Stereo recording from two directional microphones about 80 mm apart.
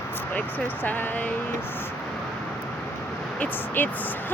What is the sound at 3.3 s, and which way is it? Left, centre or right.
Speech, left.